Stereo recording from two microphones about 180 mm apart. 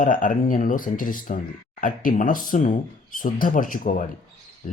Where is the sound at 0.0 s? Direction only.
50° left (ahead or behind).